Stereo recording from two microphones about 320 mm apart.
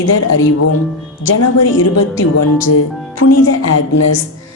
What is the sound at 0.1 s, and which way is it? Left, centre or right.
A woman's voice, left.